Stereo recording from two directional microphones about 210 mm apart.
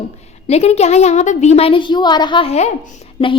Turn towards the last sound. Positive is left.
turn(degrees=30)  # may be behind; listen again after turning